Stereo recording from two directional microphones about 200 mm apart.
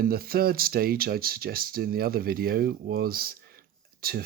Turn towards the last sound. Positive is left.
turn(degrees=-50)  # may be behind; listen again after turning